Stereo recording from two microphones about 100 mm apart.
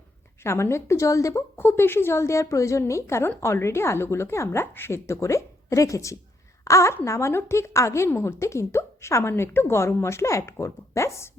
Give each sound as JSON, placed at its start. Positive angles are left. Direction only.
{"t": 0.4, "sound": "a woman's voice", "side_deg": 25}